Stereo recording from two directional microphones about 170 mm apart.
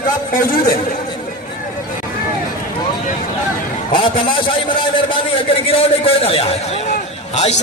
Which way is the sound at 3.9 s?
30° left (ahead or behind).